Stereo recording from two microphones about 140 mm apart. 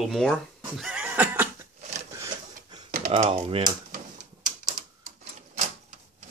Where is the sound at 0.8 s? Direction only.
10° right (ahead or behind).